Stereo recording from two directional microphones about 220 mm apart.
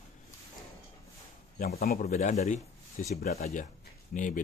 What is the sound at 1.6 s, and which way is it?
Speech, 45° left (ahead or behind).